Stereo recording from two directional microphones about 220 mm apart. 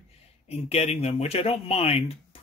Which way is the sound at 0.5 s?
30° left (ahead or behind).